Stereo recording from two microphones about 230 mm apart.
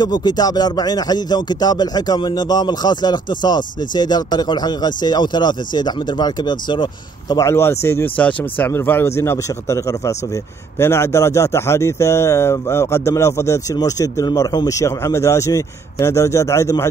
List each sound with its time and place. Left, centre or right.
0.0 s speech: centre